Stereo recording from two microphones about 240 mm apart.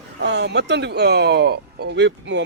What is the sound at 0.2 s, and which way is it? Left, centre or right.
Speech, right.